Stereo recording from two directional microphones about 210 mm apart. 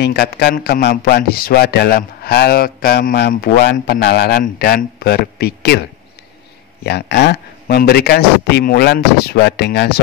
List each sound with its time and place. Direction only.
0.0 s a man's voice: 50° left (ahead or behind)
6.8 s a man's voice: 50° left (ahead or behind)